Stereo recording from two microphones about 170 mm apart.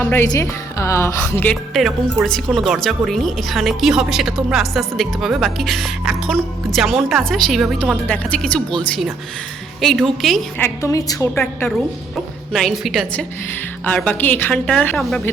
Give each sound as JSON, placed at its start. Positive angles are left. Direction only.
{"t": 0.0, "sound": "a woman's voice", "side_deg": 15}
{"t": 1.7, "sound": "a woman's voice", "side_deg": 0}
{"t": 9.8, "sound": "speech", "side_deg": 0}
{"t": 10.6, "sound": "a woman's voice", "side_deg": 20}
{"t": 12.5, "sound": "a woman's voice", "side_deg": 0}